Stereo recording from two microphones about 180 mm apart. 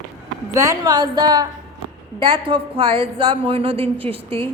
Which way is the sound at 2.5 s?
30° right (ahead or behind).